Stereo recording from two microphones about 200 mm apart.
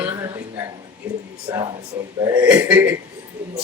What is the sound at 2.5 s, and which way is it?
Speech, 5° right (ahead or behind).